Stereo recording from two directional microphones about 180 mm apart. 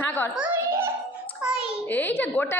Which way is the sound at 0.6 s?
15° right (ahead or behind).